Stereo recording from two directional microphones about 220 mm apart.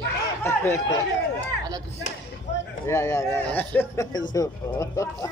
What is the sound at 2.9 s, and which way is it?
A man's voice, 15° left (ahead or behind).